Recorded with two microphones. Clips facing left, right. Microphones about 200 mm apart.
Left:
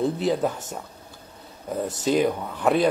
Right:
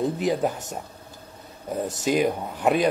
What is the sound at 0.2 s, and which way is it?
Speech, 15° right (ahead or behind).